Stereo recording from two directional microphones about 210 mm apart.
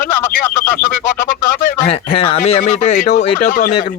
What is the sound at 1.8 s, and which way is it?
A man's voice, 25° left (ahead or behind).